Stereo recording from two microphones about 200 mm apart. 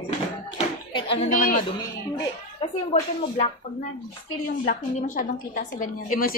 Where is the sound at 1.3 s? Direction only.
45° left (ahead or behind).